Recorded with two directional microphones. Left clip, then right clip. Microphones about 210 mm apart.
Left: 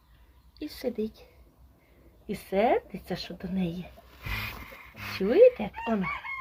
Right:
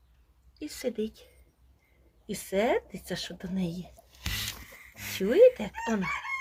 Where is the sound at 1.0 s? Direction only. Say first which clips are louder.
Even; 20° right (ahead or behind).